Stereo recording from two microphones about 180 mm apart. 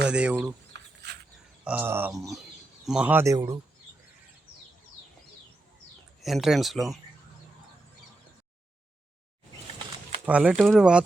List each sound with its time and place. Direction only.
0.1 s speech: 5° right (ahead or behind)
0.7 s a sound: 65° right (ahead or behind)
1.6 s speech: 10° right (ahead or behind)
6.2 s speech: centre (ahead or behind)
10.2 s speech: 5° right (ahead or behind)